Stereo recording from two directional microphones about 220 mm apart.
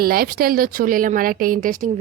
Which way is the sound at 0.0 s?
40° right (ahead or behind).